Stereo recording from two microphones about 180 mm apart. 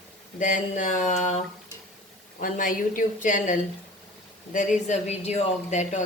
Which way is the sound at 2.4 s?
50° left (ahead or behind).